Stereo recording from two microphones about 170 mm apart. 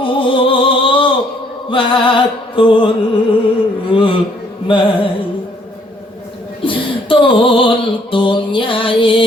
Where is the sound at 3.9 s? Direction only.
30° left (ahead or behind).